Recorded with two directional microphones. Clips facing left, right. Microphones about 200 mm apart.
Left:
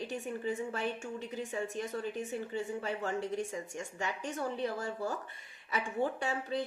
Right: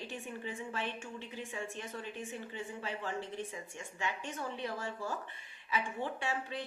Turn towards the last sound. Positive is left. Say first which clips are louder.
# left 3 dB
turn(degrees=40)  # may be behind; listen again after turning